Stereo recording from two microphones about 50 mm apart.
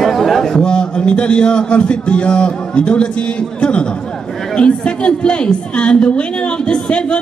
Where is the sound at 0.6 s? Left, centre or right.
Centre.